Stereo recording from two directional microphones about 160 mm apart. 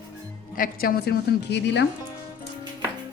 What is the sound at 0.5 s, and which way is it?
A woman's voice, 65° left (ahead or behind).